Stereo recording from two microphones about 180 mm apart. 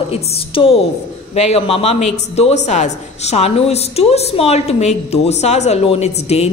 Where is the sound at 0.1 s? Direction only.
30° left (ahead or behind).